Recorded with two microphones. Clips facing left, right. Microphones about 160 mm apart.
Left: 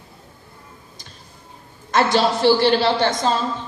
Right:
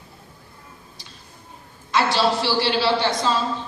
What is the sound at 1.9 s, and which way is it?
Speech, 50° left (ahead or behind).